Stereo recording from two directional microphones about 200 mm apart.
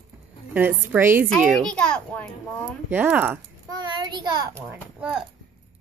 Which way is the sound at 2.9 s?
10° right (ahead or behind).